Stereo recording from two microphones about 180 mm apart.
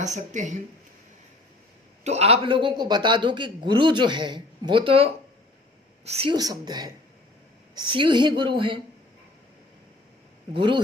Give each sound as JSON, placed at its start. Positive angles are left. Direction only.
{"t": 0.0, "sound": "speech", "side_deg": -40}
{"t": 2.0, "sound": "a man's voice", "side_deg": -35}
{"t": 6.1, "sound": "speech", "side_deg": -35}
{"t": 6.3, "sound": "a man's voice", "side_deg": -20}
{"t": 10.5, "sound": "a man's voice", "side_deg": -25}